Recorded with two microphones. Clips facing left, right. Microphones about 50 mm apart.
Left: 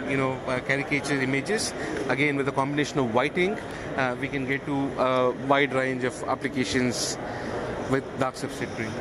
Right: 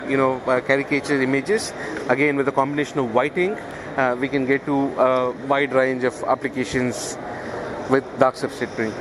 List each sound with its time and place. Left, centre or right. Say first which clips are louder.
0.1 s a man's voice: right 9 dB; right
2.6 s speech: right 4 dB; right
3.9 s speech: right 6 dB; right
4.2 s speech: right 8 dB; right
4.9 s a man's voice: right 5 dB; right
5.2 s speech: right 2 dB; centre
5.8 s speech: right 7 dB; right
7.9 s speech: right 10 dB; right